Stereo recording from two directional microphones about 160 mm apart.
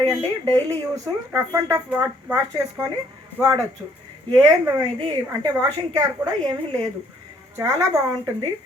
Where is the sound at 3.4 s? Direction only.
10° right (ahead or behind).